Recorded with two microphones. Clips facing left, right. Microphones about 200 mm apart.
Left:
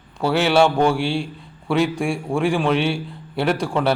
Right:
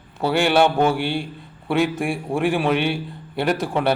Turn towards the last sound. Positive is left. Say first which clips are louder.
# left 1 dB
turn(degrees=0)  # may be behind; listen again after turning